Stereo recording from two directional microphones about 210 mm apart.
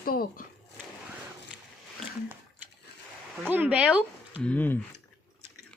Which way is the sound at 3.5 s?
5° right (ahead or behind).